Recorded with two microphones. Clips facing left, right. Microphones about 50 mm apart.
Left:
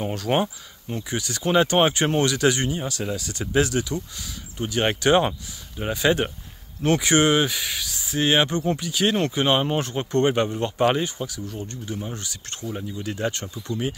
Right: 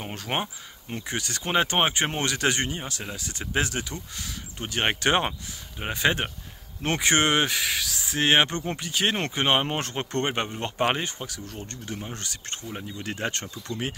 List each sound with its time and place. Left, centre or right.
0.0 s speech: right
0.9 s speech: right
2.8 s speech: right